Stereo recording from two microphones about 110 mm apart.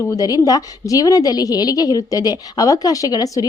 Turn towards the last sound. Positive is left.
turn(degrees=35)  # may be behind; listen again after turning